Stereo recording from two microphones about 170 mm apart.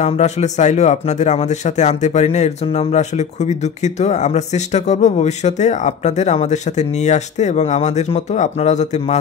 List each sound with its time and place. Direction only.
0.0 s speech: 45° left (ahead or behind)